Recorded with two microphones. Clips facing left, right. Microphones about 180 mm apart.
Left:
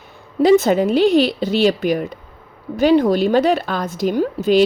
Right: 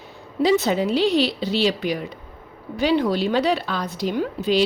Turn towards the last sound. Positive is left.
turn(degrees=50)  # may be behind; listen again after turning